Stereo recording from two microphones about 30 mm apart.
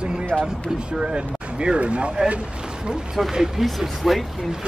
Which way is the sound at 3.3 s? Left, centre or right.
Centre.